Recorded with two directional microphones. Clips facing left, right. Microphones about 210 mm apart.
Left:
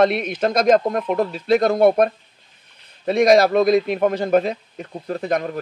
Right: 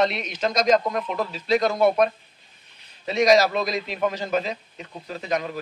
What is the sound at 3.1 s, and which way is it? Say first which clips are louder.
Speech: left 4 dB; 55° left (ahead or behind).